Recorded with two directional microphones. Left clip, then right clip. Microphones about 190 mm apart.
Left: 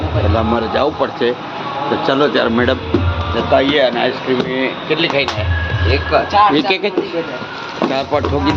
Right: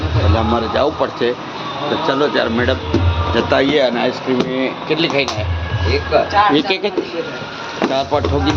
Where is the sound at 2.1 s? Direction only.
15° left (ahead or behind).